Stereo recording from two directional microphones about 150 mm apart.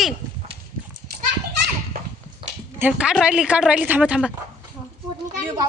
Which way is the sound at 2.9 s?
5° right (ahead or behind).